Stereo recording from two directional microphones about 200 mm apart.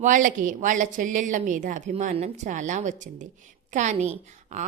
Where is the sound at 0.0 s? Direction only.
40° right (ahead or behind).